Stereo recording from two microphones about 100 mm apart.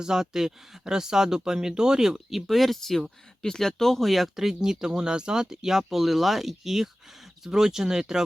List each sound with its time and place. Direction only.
0.0 s speech: 5° right (ahead or behind)